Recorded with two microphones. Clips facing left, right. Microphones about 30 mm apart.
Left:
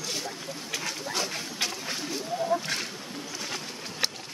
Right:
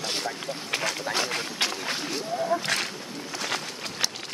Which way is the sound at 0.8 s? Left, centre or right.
Right.